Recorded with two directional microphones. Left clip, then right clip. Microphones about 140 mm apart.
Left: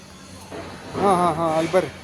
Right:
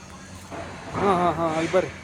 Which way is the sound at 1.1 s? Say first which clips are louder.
Left 3 dB; 60° left (ahead or behind).